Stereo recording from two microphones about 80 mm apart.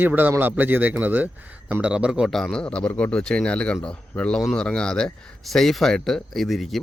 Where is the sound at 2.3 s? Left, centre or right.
Centre.